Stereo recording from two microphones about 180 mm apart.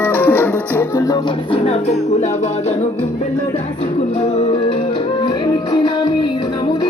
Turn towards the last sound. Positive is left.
turn(degrees=25)  # may be behind; listen again after turning